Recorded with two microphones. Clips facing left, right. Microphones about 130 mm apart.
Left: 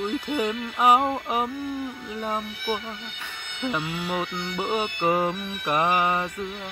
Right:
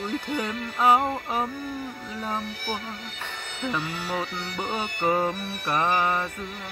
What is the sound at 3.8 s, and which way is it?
Music, 40° right (ahead or behind).